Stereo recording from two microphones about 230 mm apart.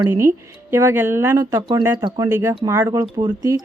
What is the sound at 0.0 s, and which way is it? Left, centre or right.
Speech, centre.